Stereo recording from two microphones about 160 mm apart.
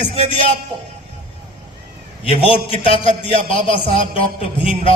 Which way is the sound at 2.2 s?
35° left (ahead or behind).